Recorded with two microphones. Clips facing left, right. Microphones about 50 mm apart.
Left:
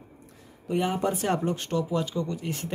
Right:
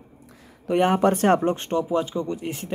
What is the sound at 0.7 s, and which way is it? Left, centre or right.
Speech, right.